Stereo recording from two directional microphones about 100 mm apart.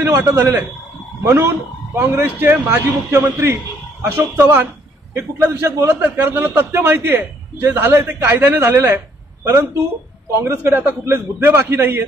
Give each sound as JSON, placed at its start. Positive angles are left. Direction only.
{"t": 0.1, "sound": "a man's voice", "side_deg": -30}